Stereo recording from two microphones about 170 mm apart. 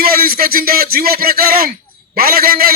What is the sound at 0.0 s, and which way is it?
A man's voice, 60° right (ahead or behind).